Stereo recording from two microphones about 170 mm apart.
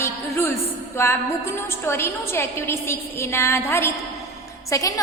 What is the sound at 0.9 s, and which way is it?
A woman's voice, 15° left (ahead or behind).